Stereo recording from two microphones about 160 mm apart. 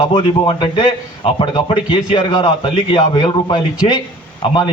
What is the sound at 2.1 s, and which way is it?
A man's voice, 30° left (ahead or behind).